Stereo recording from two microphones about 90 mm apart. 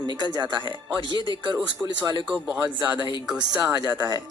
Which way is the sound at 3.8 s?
50° left (ahead or behind).